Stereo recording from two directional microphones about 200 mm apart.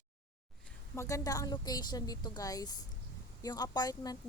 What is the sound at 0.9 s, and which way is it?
A woman's voice, 15° left (ahead or behind).